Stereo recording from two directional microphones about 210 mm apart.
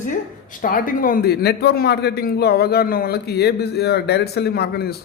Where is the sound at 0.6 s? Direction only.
40° left (ahead or behind).